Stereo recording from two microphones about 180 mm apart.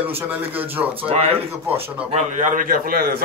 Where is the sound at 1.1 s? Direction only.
35° right (ahead or behind).